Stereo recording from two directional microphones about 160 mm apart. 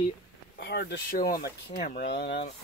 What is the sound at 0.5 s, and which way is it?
Speech, 85° left.